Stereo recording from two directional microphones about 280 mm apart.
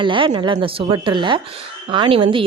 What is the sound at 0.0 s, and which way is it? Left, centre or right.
Speech, centre.